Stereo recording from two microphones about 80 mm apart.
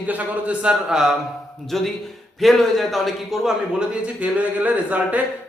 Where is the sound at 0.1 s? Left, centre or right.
Centre.